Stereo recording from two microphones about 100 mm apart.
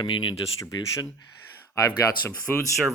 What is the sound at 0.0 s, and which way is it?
Speech, 50° left (ahead or behind).